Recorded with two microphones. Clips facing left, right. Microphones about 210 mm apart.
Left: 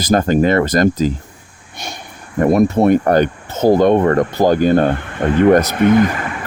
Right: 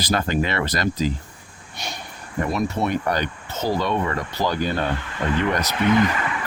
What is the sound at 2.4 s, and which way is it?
Speech, 50° left (ahead or behind).